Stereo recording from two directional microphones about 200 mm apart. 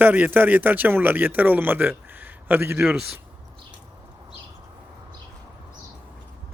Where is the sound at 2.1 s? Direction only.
10° right (ahead or behind).